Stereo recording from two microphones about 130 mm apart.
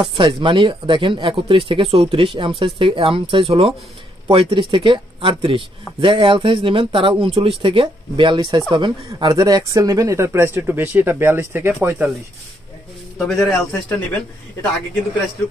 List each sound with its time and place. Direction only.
0.1 s speech: 40° right (ahead or behind); by 12.1 s 20° right (ahead or behind)
13.2 s a man's voice: 5° left (ahead or behind)